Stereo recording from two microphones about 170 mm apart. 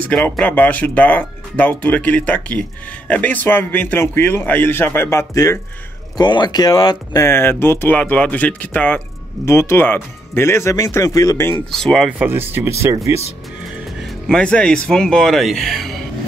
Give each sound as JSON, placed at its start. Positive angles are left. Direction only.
{"t": 0.1, "sound": "speech", "side_deg": 5}
{"t": 11.7, "sound": "speech", "side_deg": 0}
{"t": 12.3, "sound": "speech", "side_deg": -15}
{"t": 14.2, "sound": "speech", "side_deg": 5}